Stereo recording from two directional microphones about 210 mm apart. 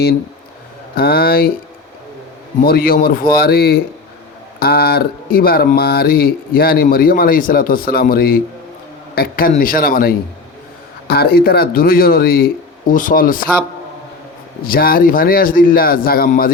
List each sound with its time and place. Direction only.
0.9 s speech: 45° left (ahead or behind)
2.6 s speech: 45° left (ahead or behind)
14.6 s speech: 45° left (ahead or behind)